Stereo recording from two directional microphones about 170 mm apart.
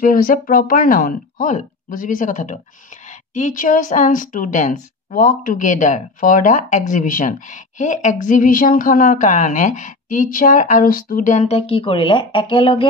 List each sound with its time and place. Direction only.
0.0 s a woman's voice: 55° left (ahead or behind); by 12.8 s 30° left (ahead or behind)